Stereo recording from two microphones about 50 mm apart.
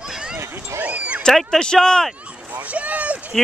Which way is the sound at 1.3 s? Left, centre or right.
Centre.